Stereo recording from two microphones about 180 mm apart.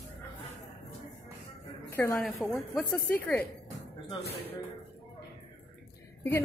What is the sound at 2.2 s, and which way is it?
A woman's voice, centre (ahead or behind).